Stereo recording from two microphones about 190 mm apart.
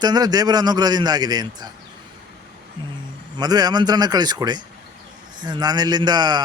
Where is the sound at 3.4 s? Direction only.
20° right (ahead or behind).